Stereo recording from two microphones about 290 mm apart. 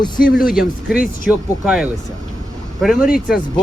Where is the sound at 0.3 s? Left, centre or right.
Centre.